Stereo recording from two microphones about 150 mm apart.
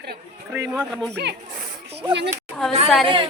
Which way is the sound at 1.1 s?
90° right.